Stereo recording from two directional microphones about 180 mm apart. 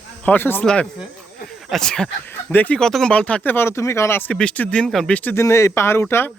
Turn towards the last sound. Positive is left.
turn(degrees=15)  # may be behind; listen again after turning